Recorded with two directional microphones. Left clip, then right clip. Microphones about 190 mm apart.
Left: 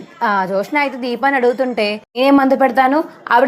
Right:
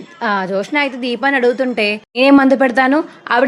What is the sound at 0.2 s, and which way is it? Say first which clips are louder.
A woman's voice: left 1 dB; 15° right (ahead or behind).